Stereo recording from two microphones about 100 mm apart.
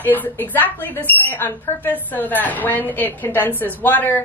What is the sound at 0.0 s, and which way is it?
Speech, 20° left (ahead or behind).